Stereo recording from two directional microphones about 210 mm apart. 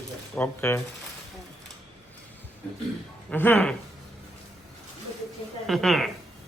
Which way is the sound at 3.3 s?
10° left (ahead or behind).